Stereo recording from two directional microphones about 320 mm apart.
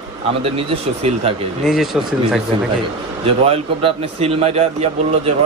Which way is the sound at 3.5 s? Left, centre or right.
Centre.